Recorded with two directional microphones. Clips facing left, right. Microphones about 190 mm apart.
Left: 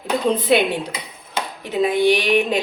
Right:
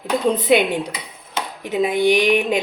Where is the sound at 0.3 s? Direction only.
15° right (ahead or behind).